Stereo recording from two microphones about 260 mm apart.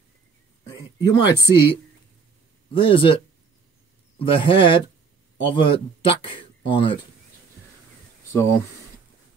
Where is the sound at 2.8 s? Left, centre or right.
Centre.